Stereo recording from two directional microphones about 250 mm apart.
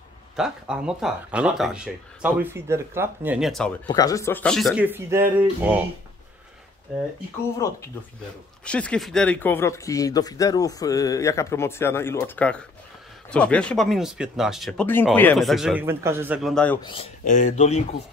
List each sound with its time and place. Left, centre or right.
0.4 s speech: centre
3.8 s speech: centre
8.6 s speech: centre
16.8 s speech: left